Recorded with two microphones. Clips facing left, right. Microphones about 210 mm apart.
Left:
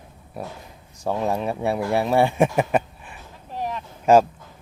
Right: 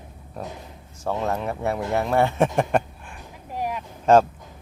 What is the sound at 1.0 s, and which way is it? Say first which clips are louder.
Speech: left 2 dB; 15° left (ahead or behind).